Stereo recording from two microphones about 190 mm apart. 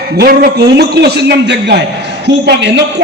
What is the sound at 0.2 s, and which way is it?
A man's voice, 55° right (ahead or behind).